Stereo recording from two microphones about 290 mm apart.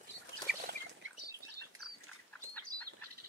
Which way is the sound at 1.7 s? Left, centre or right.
Right.